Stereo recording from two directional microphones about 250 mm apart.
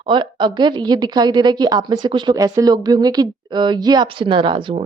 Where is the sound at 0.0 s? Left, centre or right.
Centre.